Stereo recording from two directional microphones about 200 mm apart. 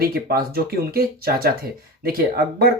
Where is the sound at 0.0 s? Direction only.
50° right (ahead or behind).